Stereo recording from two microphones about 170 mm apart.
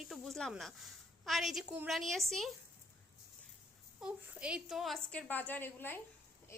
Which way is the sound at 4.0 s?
5° right (ahead or behind).